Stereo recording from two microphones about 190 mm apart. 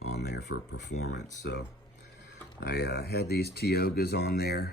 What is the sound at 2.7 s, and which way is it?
Speech, 60° left (ahead or behind).